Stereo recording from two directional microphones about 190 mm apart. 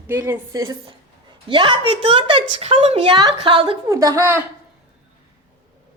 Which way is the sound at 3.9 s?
15° right (ahead or behind).